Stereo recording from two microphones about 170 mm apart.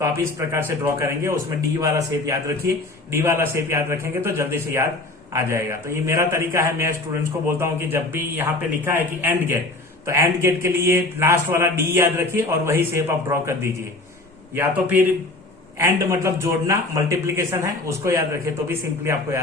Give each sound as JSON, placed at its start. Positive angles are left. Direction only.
{"t": 0.0, "sound": "a man's voice", "side_deg": -15}